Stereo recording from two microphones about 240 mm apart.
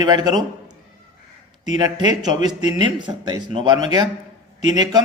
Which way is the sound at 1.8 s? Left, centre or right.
Centre.